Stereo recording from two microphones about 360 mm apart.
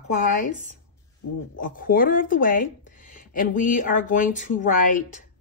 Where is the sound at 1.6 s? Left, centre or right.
Left.